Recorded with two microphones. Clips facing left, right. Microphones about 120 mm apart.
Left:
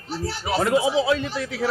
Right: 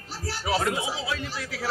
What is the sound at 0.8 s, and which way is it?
Speech, 25° left (ahead or behind).